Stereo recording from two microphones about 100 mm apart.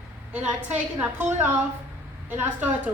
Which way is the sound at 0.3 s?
15° right (ahead or behind).